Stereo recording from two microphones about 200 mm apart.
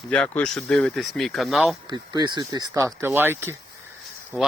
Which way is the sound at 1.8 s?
20° right (ahead or behind).